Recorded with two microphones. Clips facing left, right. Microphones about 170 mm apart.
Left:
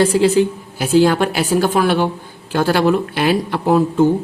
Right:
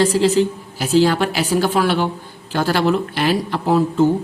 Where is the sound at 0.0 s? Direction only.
55° left (ahead or behind).